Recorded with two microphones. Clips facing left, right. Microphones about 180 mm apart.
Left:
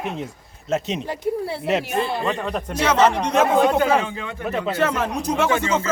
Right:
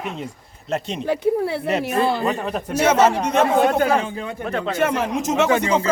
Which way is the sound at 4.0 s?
40° right (ahead or behind).